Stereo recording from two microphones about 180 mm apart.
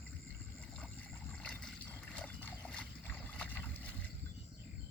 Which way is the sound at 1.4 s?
5° left (ahead or behind).